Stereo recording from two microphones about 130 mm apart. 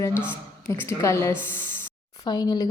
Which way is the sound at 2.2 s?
30° left (ahead or behind).